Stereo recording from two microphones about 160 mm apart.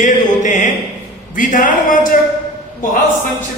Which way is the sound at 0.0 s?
50° left (ahead or behind).